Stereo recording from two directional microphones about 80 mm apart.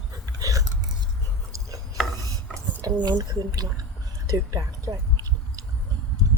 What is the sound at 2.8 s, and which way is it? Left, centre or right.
Speech, right.